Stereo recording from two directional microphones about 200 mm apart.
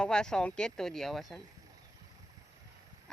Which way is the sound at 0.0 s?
5° left (ahead or behind).